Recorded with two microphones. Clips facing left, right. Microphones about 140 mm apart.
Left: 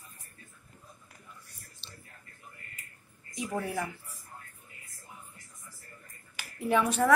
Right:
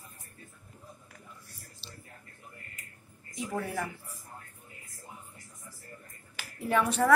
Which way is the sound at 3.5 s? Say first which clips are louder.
Left 1 dB; centre (ahead or behind).